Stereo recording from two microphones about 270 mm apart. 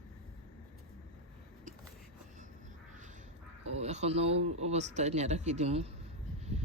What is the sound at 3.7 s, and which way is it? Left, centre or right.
Speech, right.